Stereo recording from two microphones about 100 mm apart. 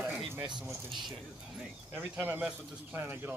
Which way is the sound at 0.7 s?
Centre (ahead or behind).